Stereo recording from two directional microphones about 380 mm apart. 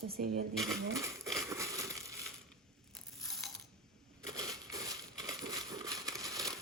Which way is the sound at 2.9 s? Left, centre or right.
Centre.